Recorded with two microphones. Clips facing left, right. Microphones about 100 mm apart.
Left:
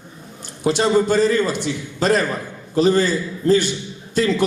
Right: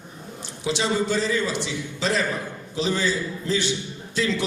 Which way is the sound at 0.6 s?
50° left (ahead or behind).